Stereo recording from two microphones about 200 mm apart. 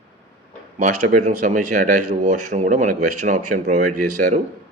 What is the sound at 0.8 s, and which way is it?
Speech, 40° right (ahead or behind).